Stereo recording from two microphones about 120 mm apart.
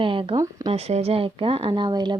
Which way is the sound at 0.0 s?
45° right (ahead or behind).